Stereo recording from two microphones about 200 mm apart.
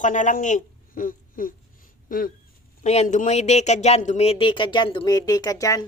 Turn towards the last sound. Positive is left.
turn(degrees=15)  # may be behind; listen again after turning